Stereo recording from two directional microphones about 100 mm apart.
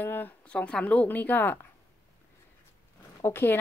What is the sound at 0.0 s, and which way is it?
Speech, 20° left (ahead or behind).